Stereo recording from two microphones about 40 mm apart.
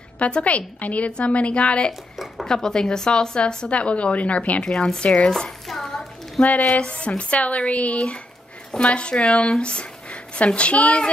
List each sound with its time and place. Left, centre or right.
0.2 s a woman's voice: left
2.4 s a woman's voice: centre; by 4.6 s left
4.6 s a woman's voice: left
5.1 s speech: centre
5.7 s hands: centre
6.8 s a woman's voice: left